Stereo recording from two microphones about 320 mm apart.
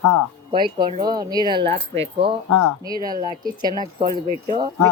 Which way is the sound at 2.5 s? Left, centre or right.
Left.